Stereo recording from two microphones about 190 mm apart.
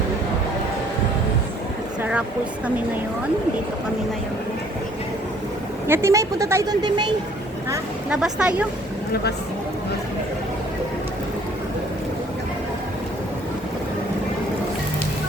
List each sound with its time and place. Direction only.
5.9 s speech: 15° right (ahead or behind)
7.7 s speech: 5° right (ahead or behind)